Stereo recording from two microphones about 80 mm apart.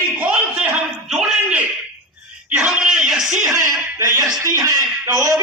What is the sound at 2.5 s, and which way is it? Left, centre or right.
Speech, centre.